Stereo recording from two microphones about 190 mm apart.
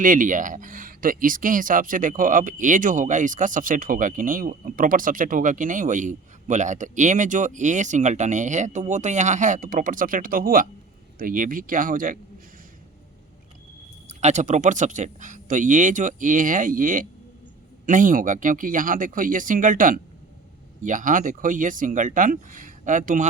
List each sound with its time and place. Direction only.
0.0 s speech: 45° right (ahead or behind)
14.1 s speech: 35° right (ahead or behind)